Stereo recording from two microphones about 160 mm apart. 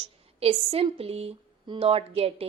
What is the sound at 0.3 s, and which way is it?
A woman's voice, 40° right (ahead or behind).